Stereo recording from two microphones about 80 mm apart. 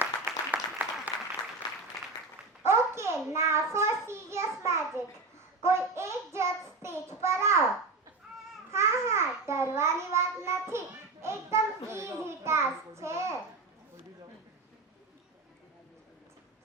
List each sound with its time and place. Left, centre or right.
0.0 s applause: right
2.6 s a sound: right
5.6 s babbling: right
6.0 s child singing: right
8.7 s babbling: right